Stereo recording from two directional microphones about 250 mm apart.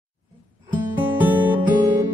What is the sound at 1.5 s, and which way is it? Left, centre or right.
Music, centre.